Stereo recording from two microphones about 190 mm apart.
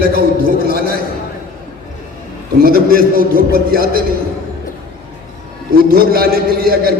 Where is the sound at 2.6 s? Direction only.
50° right (ahead or behind).